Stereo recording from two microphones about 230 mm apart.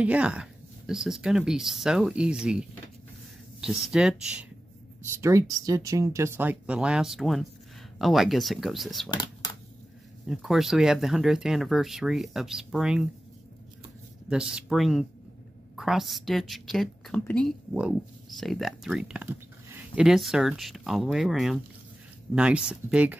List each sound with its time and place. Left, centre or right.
0.0 s a woman's voice: centre
3.6 s a woman's voice: centre
9.1 s a sound: centre
10.2 s a woman's voice: centre
14.3 s a woman's voice: centre